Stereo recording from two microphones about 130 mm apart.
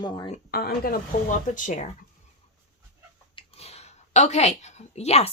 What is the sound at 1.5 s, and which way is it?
Speech, 80° left.